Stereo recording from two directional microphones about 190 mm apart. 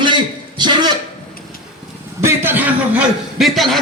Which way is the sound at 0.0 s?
25° right (ahead or behind).